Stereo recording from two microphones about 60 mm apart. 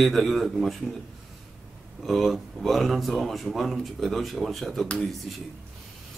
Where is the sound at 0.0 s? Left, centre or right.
Centre.